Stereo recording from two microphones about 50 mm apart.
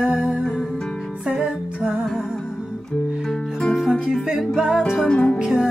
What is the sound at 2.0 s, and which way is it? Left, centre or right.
Music, centre.